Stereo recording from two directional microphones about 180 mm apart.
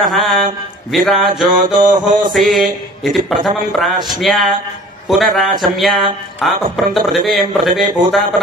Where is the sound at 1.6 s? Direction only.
45° right (ahead or behind).